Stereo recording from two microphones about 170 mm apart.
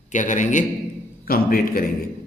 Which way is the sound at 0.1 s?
50° left (ahead or behind).